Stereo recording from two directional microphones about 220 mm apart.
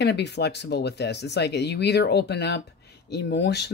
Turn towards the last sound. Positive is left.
turn(degrees=50)  # may be behind; listen again after turning